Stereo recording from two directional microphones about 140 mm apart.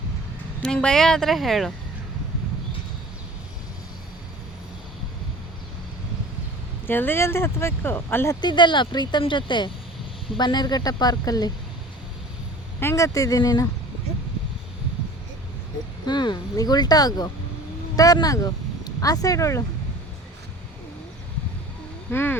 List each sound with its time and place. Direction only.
0.6 s speech: 5° left (ahead or behind)
6.8 s speech: 15° left (ahead or behind)
8.4 s speech: 35° left (ahead or behind)
12.8 s speech: 20° left (ahead or behind)
16.0 s speech: 30° left (ahead or behind)
22.1 s speech: 15° left (ahead or behind)